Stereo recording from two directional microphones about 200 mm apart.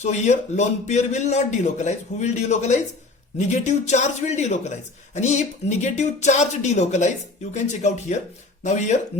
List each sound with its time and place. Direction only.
0.0 s a man's voice: 35° left (ahead or behind)